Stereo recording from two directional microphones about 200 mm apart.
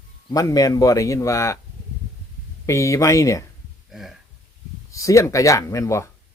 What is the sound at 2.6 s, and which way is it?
Speech, 15° left (ahead or behind).